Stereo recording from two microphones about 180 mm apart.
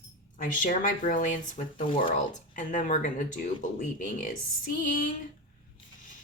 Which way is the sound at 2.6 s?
45° left (ahead or behind).